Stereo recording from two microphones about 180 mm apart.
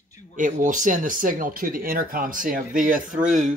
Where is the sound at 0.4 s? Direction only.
45° right (ahead or behind).